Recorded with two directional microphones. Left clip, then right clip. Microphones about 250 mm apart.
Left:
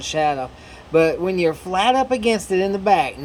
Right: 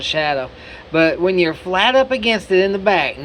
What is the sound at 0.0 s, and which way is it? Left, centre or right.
Speech, centre.